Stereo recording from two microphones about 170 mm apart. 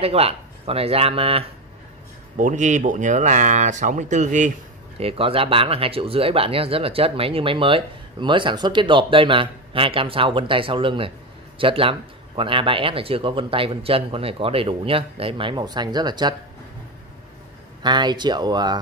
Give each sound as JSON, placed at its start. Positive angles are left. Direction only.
{"t": 0.0, "sound": "speech", "side_deg": -35}
{"t": 2.3, "sound": "speech", "side_deg": -45}
{"t": 4.9, "sound": "speech", "side_deg": -35}
{"t": 17.8, "sound": "speech", "side_deg": -25}